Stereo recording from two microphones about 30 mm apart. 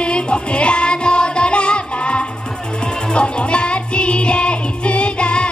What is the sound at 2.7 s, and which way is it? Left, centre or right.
Music, left.